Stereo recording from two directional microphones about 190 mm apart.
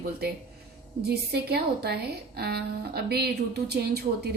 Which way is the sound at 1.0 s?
55° right (ahead or behind).